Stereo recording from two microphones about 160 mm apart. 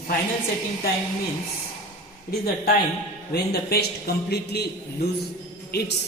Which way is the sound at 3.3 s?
85° left.